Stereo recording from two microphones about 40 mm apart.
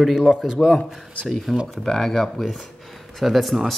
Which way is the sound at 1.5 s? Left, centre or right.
Centre.